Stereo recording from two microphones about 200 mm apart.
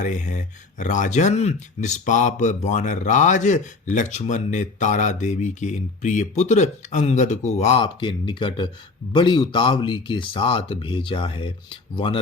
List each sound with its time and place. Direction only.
0.0 s speech: 35° left (ahead or behind)